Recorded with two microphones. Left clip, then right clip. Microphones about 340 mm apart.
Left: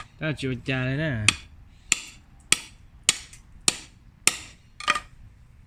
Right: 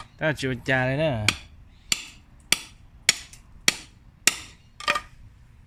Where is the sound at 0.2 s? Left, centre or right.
Centre.